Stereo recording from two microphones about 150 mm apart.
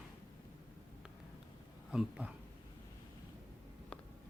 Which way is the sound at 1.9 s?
5° right (ahead or behind).